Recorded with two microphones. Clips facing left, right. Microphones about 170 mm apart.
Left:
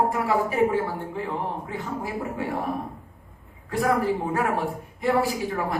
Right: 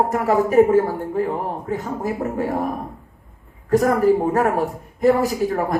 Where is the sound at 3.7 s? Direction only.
45° right (ahead or behind).